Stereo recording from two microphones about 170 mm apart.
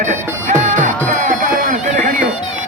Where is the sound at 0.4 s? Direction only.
45° right (ahead or behind).